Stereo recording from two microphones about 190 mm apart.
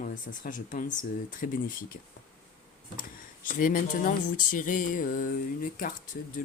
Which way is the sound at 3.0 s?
45° left (ahead or behind).